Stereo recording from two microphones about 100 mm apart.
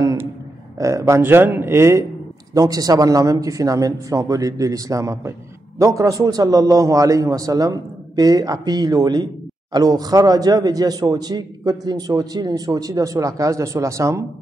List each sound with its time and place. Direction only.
0.0 s a sound: 30° right (ahead or behind)
0.7 s a man's voice: 30° right (ahead or behind)
2.5 s a man's voice: 35° right (ahead or behind)